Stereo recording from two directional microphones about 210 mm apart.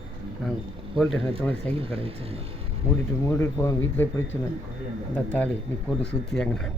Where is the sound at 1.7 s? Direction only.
25° right (ahead or behind).